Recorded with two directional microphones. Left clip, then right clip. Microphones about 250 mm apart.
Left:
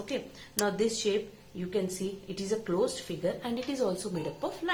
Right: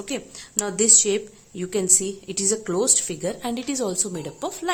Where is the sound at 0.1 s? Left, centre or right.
Right.